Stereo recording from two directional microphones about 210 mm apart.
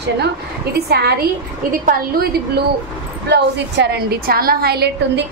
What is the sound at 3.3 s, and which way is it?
A woman's voice, 55° right (ahead or behind).